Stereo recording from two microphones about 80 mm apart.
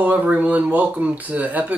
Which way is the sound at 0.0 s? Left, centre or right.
Centre.